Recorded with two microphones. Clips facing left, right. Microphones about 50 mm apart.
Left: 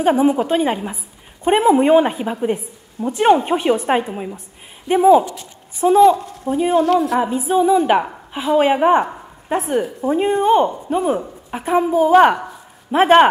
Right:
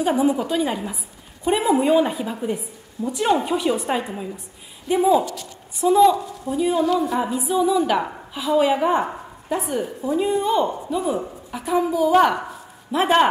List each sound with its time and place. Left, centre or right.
0.0 s a woman's voice: left
5.1 s speech: left
5.8 s a woman's voice: left
6.8 s a woman's voice: left
7.2 s a woman's voice: left